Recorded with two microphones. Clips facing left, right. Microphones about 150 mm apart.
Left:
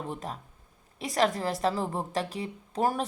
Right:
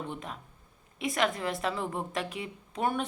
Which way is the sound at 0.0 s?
35° left (ahead or behind).